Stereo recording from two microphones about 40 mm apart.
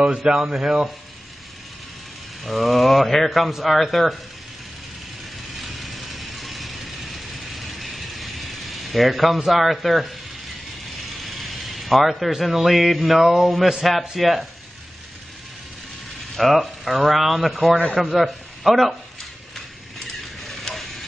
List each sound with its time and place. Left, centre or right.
0.1 s speech: centre
2.4 s speech: centre
5.6 s ratchet: centre
11.1 s a man's voice: centre
16.3 s a man's voice: centre
20.1 s a sound: centre